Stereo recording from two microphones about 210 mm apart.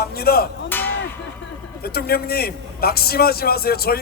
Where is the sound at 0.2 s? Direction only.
45° left (ahead or behind).